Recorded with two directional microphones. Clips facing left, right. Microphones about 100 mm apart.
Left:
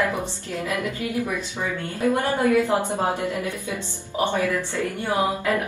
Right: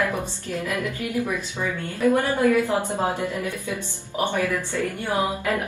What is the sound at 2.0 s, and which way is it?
A woman's voice, 20° left (ahead or behind).